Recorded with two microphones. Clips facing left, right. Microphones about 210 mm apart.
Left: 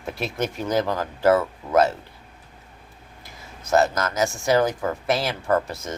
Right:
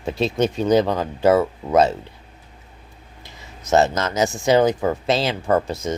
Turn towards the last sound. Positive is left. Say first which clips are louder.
# right 3 dB
turn(degrees=-20)  # may be behind; listen again after turning